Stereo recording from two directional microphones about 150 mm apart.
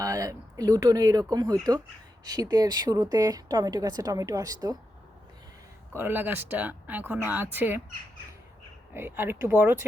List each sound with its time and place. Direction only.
0.0 s a woman's voice: 20° right (ahead or behind)
6.0 s speech: 15° right (ahead or behind)
8.9 s speech: 15° right (ahead or behind)